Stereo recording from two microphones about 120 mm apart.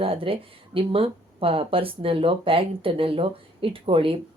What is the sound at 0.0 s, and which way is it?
Speech, 50° right (ahead or behind).